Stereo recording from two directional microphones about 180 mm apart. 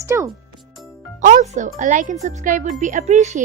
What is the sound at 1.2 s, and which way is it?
Speech, 45° right (ahead or behind).